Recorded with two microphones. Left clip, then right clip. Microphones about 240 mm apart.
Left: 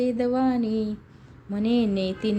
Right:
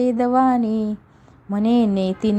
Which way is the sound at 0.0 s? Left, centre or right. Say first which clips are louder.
Right 7 dB; right.